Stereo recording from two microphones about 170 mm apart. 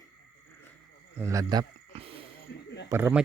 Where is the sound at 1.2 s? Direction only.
20° right (ahead or behind).